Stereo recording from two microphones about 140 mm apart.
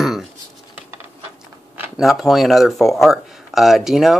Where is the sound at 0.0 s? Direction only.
5° right (ahead or behind).